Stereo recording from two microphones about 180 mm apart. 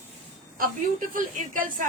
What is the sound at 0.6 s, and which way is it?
A woman's voice, 50° right (ahead or behind).